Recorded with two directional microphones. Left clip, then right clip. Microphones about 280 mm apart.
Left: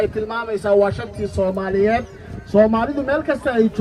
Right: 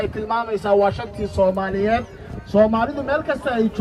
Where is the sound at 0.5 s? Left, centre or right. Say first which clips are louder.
Left 2 dB; right.